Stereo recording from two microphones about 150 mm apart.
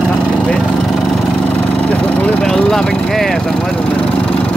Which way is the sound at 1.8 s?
5° left (ahead or behind).